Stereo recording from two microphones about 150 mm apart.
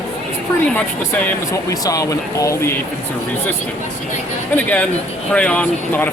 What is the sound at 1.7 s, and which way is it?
Speech, 20° left (ahead or behind).